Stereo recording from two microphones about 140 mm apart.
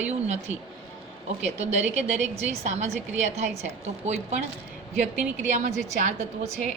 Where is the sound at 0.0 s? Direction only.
55° right (ahead or behind).